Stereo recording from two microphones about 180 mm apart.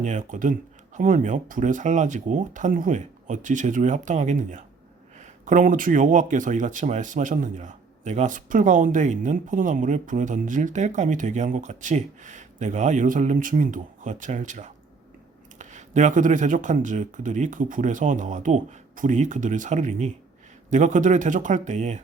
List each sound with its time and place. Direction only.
0.0 s speech: 45° right (ahead or behind)